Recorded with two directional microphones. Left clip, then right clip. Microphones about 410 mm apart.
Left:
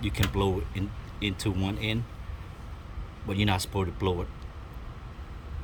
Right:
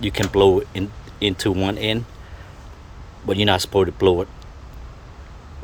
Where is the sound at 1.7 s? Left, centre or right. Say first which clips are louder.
Right 10 dB; right.